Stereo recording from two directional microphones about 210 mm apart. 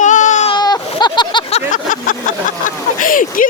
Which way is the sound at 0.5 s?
20° left (ahead or behind).